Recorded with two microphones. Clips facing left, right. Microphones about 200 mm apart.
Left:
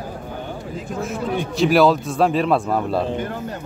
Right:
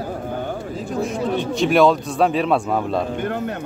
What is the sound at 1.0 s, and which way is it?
A man's voice, 5° left (ahead or behind).